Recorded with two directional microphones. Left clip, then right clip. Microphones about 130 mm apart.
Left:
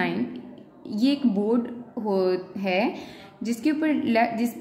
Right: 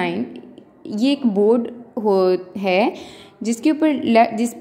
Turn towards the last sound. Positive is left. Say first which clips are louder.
# right 7 dB
turn(degrees=-40)  # may be behind; listen again after turning